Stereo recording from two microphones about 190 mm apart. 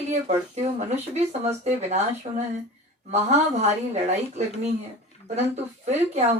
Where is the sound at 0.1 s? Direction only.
35° right (ahead or behind).